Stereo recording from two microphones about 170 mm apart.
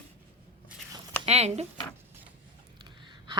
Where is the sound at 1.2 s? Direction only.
40° right (ahead or behind).